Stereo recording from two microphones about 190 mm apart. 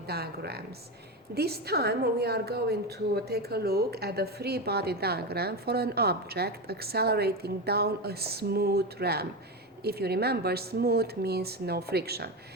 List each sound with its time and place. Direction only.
0.1 s a woman's voice: 55° right (ahead or behind)